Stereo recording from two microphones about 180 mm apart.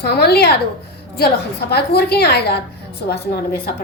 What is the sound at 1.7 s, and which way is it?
A woman's voice, 65° left (ahead or behind).